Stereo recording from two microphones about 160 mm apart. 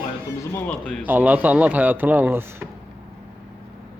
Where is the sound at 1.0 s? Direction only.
10° right (ahead or behind).